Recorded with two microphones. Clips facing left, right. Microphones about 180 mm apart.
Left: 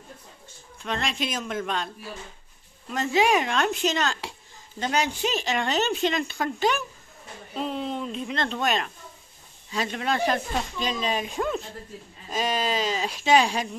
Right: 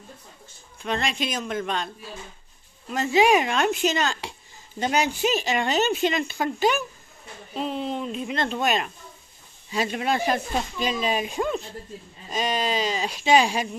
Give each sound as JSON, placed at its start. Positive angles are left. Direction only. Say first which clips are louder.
{"t": 0.8, "sound": "a woman's voice", "louder": "right 2 dB", "side_deg": 0}
{"t": 2.9, "sound": "a woman's voice", "louder": "right 3 dB", "side_deg": -5}
{"t": 4.7, "sound": "a woman's voice", "louder": "right 2 dB", "side_deg": -10}